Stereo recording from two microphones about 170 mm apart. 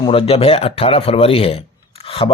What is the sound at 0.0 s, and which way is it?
A man's voice, 35° left (ahead or behind).